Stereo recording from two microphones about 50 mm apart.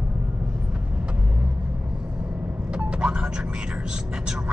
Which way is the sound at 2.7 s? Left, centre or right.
Right.